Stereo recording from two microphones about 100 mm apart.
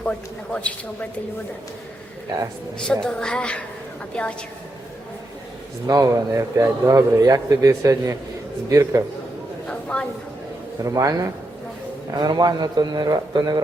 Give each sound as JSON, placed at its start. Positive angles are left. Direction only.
{"t": 0.0, "sound": "a woman's voice", "side_deg": 10}
{"t": 2.7, "sound": "a woman's voice", "side_deg": 5}
{"t": 5.8, "sound": "a man's voice", "side_deg": -35}
{"t": 9.6, "sound": "a sound", "side_deg": 10}
{"t": 10.8, "sound": "a man's voice", "side_deg": -35}